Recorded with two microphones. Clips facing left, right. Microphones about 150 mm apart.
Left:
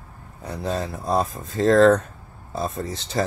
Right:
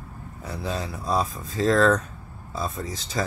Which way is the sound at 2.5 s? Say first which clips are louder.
Left 3 dB; 50° left (ahead or behind).